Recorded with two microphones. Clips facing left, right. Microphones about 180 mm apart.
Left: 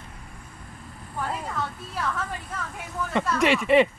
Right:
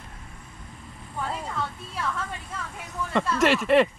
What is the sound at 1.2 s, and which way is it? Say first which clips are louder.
Music: left 1 dB; centre (ahead or behind).